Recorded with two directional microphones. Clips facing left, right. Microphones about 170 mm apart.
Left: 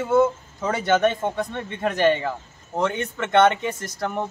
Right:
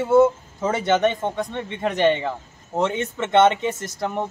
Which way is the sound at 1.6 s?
15° right (ahead or behind).